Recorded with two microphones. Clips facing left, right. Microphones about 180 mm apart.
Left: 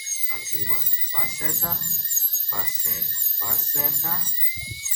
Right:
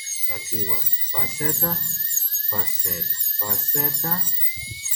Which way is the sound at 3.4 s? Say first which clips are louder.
Right 5 dB; 55° right (ahead or behind).